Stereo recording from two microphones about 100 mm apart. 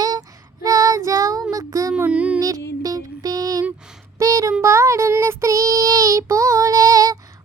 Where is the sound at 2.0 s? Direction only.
15° right (ahead or behind).